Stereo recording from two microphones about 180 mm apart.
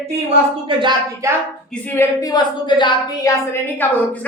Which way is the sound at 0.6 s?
25° right (ahead or behind).